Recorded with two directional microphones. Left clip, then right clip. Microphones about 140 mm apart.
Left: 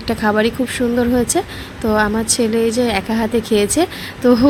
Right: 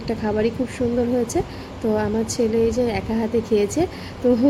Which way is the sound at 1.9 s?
35° left (ahead or behind).